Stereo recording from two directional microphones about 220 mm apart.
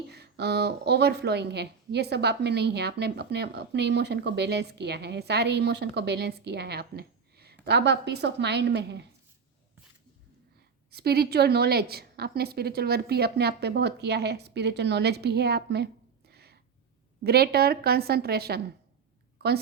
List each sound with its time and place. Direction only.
0.1 s a woman's voice: 50° right (ahead or behind)
10.9 s a woman's voice: 45° right (ahead or behind)
16.3 s a sound: 45° right (ahead or behind)
17.2 s a woman's voice: 45° right (ahead or behind)